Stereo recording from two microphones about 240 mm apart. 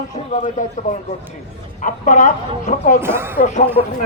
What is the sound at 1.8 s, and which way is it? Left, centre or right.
A man's voice, left.